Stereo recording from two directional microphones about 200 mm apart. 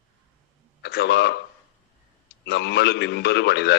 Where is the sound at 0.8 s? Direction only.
55° left (ahead or behind).